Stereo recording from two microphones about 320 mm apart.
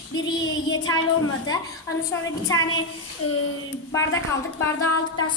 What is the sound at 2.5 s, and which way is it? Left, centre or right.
Speech, centre.